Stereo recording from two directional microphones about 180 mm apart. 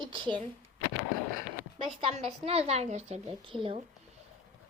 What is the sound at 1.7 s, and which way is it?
A woman's voice, 30° right (ahead or behind).